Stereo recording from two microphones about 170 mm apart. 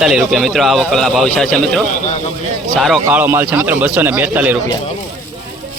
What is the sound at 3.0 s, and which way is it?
A man's voice, 10° right (ahead or behind).